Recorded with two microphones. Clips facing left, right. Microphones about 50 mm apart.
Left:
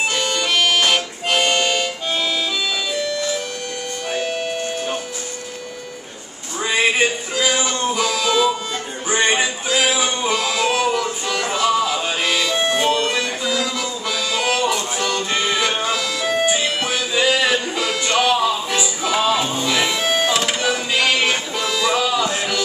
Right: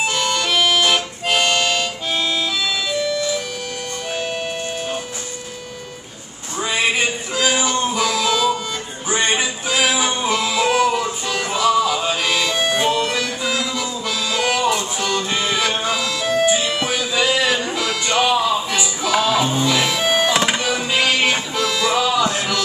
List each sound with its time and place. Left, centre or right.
0.0 s harmonica: centre
1.4 s music: centre
2.9 s music: centre
4.2 s music: centre
7.3 s music: centre
11.4 s music: centre
20.1 s music: centre